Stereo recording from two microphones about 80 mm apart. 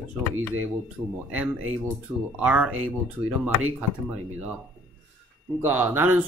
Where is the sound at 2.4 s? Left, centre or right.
Centre.